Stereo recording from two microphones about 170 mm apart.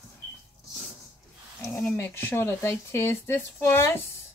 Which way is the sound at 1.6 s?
15° left (ahead or behind).